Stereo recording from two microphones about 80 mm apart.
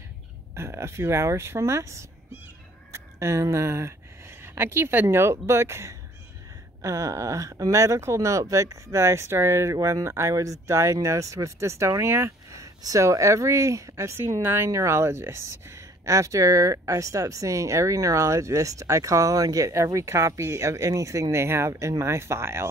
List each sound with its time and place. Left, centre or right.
0.6 s speech: right